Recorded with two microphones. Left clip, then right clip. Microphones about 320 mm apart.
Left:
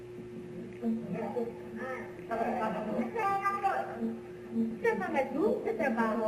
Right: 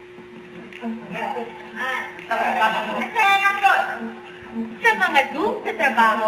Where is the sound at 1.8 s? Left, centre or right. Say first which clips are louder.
Right 16 dB; centre.